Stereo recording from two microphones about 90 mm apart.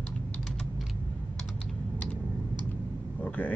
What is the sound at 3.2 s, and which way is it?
Vehicle, 20° left (ahead or behind).